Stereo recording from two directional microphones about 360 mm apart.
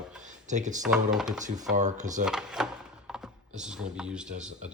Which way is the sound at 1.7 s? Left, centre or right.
Centre.